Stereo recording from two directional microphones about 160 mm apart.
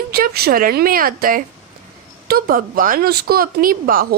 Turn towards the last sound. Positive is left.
turn(degrees=-65)  # may be behind; listen again after turning